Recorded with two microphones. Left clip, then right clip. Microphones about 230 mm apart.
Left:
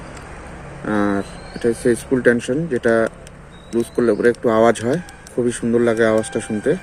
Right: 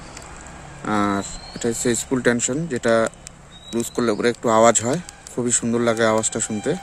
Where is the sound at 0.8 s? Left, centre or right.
Right.